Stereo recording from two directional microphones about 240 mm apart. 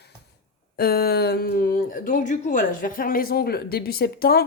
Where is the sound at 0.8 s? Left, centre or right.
Left.